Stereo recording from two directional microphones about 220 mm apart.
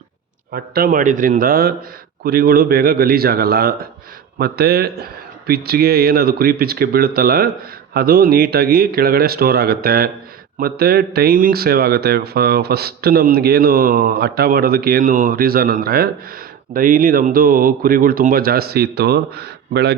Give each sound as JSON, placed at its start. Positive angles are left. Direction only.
{"t": 0.5, "sound": "speech", "side_deg": -45}